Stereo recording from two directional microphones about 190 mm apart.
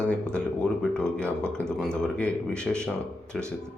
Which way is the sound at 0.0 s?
5° left (ahead or behind).